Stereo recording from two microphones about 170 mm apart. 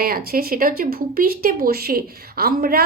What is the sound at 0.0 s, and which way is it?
A woman's voice, 60° right (ahead or behind).